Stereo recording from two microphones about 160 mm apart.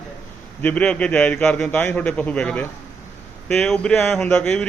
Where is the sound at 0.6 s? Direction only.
10° left (ahead or behind).